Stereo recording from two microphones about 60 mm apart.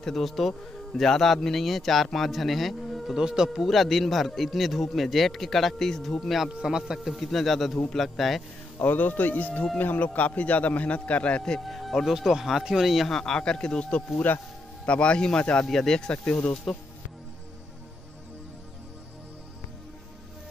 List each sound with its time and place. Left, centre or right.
0.0 s speech: centre
3.2 s speech: centre
3.4 s speech: centre
6.5 s speech: centre
7.2 s speech: centre
8.8 s a man's voice: left
11.5 s speech: centre
13.2 s speech: centre
14.1 s speech: left
14.9 s speech: centre
15.6 s speech: centre